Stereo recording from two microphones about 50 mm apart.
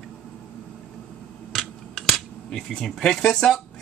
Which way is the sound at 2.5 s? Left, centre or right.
Centre.